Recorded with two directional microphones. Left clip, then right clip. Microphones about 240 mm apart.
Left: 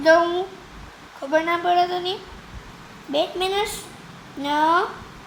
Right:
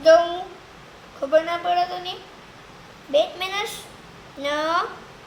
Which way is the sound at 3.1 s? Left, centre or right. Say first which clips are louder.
Right 1 dB; centre.